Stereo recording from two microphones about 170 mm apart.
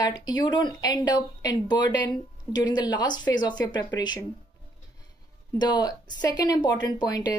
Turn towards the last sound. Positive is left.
turn(degrees=25)  # may be behind; listen again after turning